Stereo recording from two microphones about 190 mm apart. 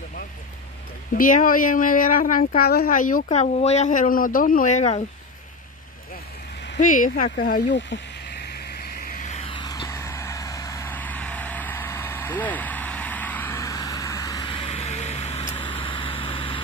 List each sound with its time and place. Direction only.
1.1 s speech: 45° left (ahead or behind)
6.8 s speech: 45° left (ahead or behind)
7.7 s a sound: 65° left (ahead or behind); by 15.4 s 35° left (ahead or behind)
15.6 s vehicle: 25° left (ahead or behind)